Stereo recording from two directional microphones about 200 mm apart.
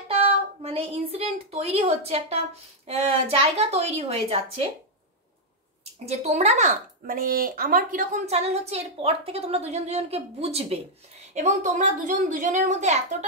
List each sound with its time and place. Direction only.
0.1 s a woman's voice: 30° right (ahead or behind)
6.0 s speech: 35° right (ahead or behind)